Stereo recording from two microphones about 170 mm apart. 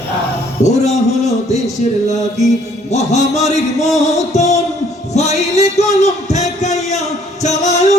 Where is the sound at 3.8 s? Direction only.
40° left (ahead or behind).